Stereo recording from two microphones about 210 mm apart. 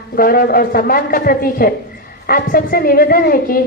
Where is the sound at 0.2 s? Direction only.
45° left (ahead or behind).